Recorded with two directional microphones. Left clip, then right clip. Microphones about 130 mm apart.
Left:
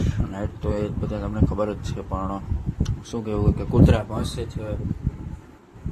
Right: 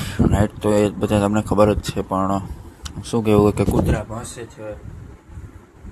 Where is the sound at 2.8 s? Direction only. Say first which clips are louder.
Right 9 dB; 40° right (ahead or behind).